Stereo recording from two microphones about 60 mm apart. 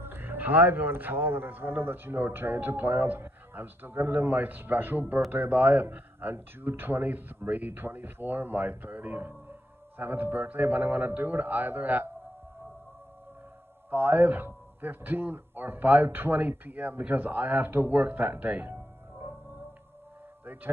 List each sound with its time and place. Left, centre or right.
0.0 s speech: right
13.8 s speech: right
18.7 s music: right